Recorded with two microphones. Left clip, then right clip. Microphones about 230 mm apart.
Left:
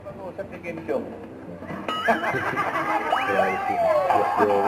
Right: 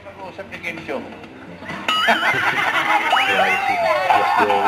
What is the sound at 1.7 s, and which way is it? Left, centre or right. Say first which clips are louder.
Music: right 6 dB; centre.